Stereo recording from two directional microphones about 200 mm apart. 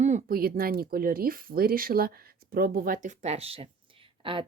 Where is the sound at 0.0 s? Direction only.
40° right (ahead or behind).